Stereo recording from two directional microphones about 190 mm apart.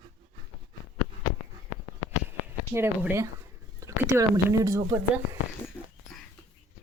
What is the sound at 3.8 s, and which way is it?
Speech, 15° right (ahead or behind).